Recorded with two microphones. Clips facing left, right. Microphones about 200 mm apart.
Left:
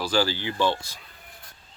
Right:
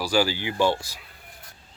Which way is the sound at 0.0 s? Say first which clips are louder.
Right 1 dB; 10° right (ahead or behind).